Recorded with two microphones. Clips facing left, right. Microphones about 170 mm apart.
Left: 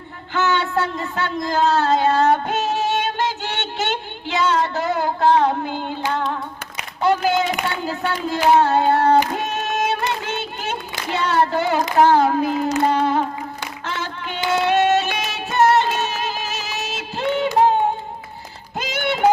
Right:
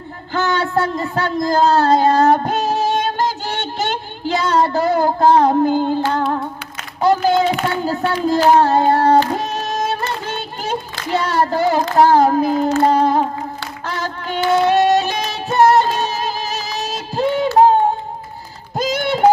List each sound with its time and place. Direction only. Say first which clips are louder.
0.3 s a sound: right 2 dB; 35° right (ahead or behind)
6.1 s humming: right 5 dB; 40° right (ahead or behind)
7.0 s a sound: right 4 dB; 35° right (ahead or behind)
7.9 s speech: right 6 dB; 40° right (ahead or behind)
8.5 s child singing: right 2 dB; 40° right (ahead or behind)
9.3 s music: right 2 dB; 35° right (ahead or behind)
10.2 s a sound: right 2 dB; 35° right (ahead or behind)
12.9 s music: right 4 dB; 40° right (ahead or behind)
13.8 s female singing: right 4 dB; 40° right (ahead or behind)
18.8 s music: right 4 dB; 40° right (ahead or behind)